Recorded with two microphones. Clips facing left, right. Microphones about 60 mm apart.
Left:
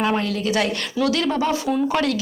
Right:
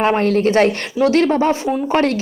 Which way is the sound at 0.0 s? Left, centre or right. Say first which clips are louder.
Right 7 dB; right.